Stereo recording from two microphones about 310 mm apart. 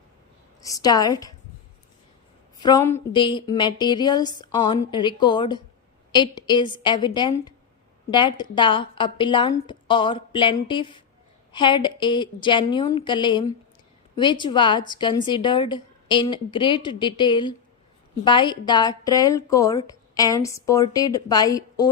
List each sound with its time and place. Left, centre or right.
0.6 s a woman's voice: centre
2.6 s a woman's voice: centre